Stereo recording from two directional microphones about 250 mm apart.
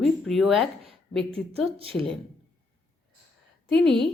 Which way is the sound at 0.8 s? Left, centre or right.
Right.